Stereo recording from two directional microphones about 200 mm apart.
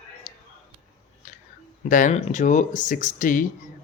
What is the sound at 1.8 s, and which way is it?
Speech, 40° left (ahead or behind).